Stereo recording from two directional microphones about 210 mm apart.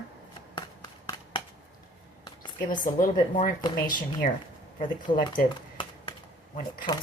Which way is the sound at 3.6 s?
20° left (ahead or behind).